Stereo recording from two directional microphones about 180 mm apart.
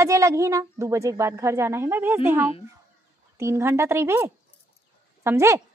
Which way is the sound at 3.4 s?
15° right (ahead or behind).